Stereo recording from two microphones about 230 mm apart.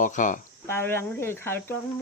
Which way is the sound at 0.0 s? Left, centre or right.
Left.